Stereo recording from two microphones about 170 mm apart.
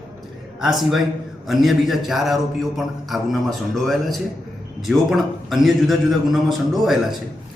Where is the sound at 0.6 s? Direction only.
Centre (ahead or behind).